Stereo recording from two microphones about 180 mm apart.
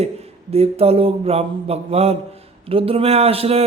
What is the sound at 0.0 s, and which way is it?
Speech, 35° right (ahead or behind).